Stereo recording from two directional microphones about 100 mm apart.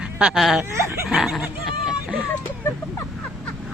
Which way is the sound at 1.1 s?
Centre (ahead or behind).